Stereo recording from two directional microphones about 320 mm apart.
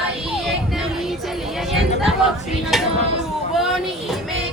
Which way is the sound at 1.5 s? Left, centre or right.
Centre.